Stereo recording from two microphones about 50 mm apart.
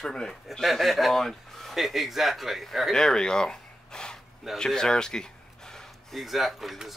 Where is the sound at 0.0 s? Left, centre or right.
Centre.